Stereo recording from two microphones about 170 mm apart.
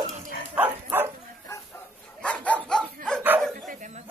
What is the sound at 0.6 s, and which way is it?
Dog, 15° right (ahead or behind).